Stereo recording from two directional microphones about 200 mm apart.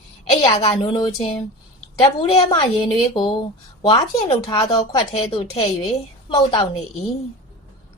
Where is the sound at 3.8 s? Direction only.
25° left (ahead or behind).